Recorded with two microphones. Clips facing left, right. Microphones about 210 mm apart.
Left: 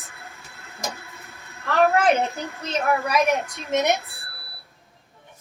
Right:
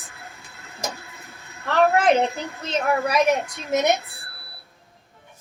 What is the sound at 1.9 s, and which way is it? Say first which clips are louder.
A woman's voice: right 1 dB; 15° right (ahead or behind).